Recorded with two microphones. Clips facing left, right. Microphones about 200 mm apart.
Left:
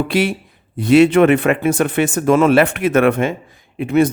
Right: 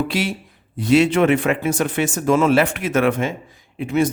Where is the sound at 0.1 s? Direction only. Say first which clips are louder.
Left 6 dB; 55° left (ahead or behind).